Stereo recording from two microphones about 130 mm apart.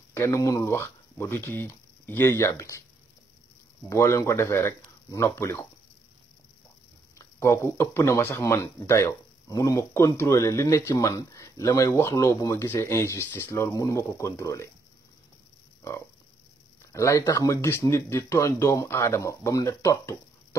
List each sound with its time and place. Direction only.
0.1 s speech: 25° left (ahead or behind)
3.9 s speech: 25° left (ahead or behind)
7.2 s speech: 25° left (ahead or behind)
16.9 s speech: 25° left (ahead or behind)